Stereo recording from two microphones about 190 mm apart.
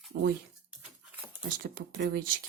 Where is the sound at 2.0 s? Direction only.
55° right (ahead or behind).